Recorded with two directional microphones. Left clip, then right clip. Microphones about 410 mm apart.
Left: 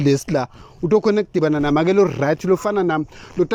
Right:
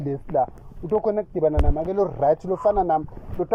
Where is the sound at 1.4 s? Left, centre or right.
Left.